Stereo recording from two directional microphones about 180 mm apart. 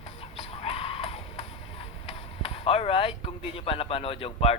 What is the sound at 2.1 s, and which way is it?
Speech, 30° left (ahead or behind).